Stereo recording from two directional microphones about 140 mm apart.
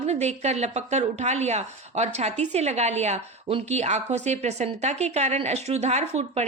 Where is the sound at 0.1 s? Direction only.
50° right (ahead or behind).